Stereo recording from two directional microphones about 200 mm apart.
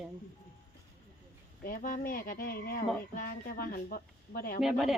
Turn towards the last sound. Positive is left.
turn(degrees=0)  # may be behind; listen again after turning